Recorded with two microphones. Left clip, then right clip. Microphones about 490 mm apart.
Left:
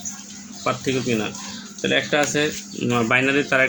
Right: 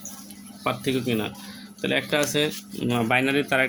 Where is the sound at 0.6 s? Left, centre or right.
Right.